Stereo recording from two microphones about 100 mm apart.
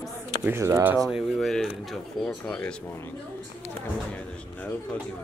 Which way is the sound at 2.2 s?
15° left (ahead or behind).